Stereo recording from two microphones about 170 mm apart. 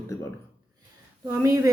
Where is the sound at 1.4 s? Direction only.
20° right (ahead or behind).